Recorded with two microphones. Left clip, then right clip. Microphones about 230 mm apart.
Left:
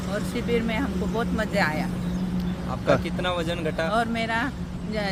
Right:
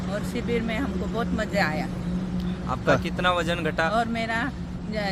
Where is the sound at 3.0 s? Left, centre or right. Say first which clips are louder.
Right 3 dB; centre.